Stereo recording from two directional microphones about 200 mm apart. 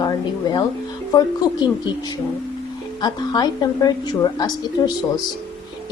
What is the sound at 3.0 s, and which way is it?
A woman's voice, 20° left (ahead or behind).